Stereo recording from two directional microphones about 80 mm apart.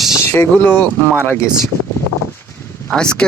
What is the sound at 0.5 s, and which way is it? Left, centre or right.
Speech, centre.